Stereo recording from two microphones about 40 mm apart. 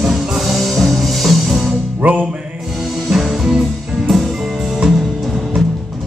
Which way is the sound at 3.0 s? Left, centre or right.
Centre.